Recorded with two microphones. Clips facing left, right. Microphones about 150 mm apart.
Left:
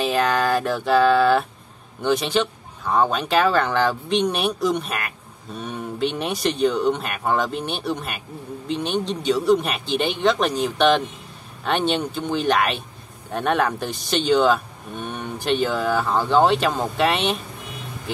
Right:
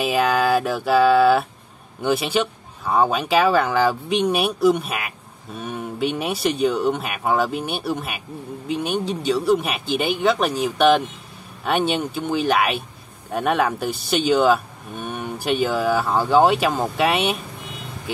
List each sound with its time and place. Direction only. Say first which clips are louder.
0.0 s speech: right 1 dB; 10° right (ahead or behind)